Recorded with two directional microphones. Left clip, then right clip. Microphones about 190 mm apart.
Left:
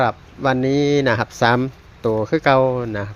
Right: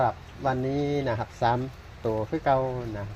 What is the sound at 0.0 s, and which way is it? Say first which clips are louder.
Speech: left 7 dB; 45° left (ahead or behind).